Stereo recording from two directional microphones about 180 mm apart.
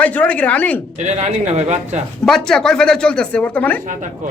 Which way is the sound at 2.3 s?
Centre (ahead or behind).